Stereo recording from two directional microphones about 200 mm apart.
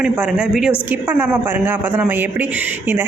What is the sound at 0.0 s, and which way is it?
Speech, 5° right (ahead or behind).